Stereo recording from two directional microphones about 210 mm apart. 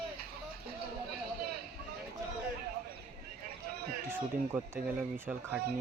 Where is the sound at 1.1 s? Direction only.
50° right (ahead or behind).